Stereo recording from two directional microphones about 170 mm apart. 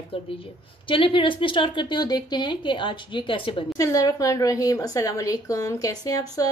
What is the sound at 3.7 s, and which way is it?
Speech, 20° left (ahead or behind).